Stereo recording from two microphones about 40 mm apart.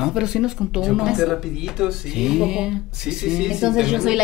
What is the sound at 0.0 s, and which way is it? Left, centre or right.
Speech, centre.